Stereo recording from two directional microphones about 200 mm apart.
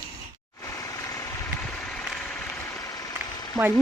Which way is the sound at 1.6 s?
5° left (ahead or behind).